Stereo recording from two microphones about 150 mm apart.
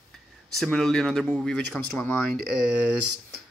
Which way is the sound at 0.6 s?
5° left (ahead or behind).